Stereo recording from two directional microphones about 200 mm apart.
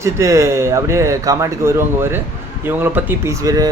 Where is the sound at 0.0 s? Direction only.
15° right (ahead or behind).